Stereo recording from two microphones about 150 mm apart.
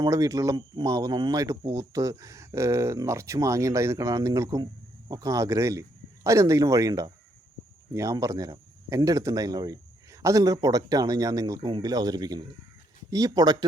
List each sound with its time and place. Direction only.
0.0 s speech: 25° right (ahead or behind)